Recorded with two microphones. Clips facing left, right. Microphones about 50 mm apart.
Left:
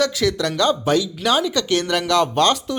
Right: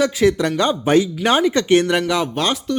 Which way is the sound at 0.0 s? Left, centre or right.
Right.